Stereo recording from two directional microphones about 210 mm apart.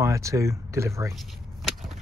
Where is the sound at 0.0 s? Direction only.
15° right (ahead or behind).